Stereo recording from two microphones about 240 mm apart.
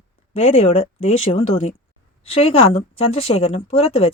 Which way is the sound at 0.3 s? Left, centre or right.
Left.